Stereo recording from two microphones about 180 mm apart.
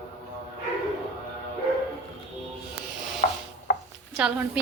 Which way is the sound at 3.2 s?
45° left (ahead or behind).